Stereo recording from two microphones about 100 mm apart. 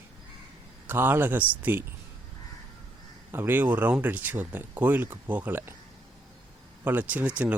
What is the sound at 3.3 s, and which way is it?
Speech, 20° right (ahead or behind).